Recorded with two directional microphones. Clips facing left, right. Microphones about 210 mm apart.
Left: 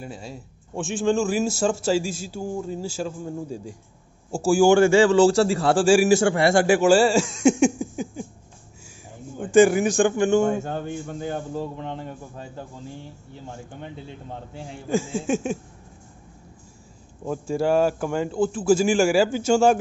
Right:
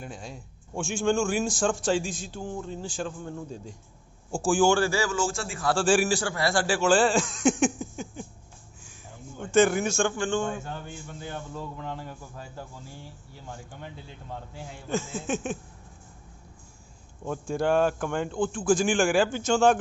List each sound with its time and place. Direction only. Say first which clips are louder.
0.0 s a man's voice: left 4 dB; 5° left (ahead or behind)
4.7 s a man's voice: left 10 dB; 25° left (ahead or behind)
5.7 s a man's voice: left 4 dB; 15° left (ahead or behind)
6.1 s a man's voice: left 9 dB; 25° left (ahead or behind)
6.6 s speech: left 4 dB; 15° left (ahead or behind)
9.4 s a man's voice: left 6 dB; 15° left (ahead or behind)
10.6 s a man's voice: left 9 dB; 45° left (ahead or behind)
11.6 s a man's voice: left 5 dB; 25° left (ahead or behind)
14.5 s a man's voice: left 4 dB; 30° left (ahead or behind)
15.1 s a man's voice: left 6 dB; 10° left (ahead or behind)
17.2 s a man's voice: left 4 dB; 5° left (ahead or behind)